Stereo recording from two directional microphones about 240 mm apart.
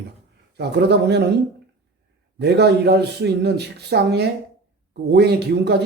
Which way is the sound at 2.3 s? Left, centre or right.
Right.